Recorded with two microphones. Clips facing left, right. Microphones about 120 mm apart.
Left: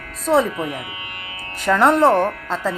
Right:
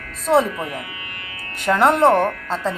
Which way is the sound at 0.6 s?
25° left (ahead or behind).